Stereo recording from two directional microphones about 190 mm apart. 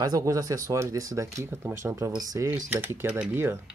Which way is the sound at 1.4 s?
15° right (ahead or behind).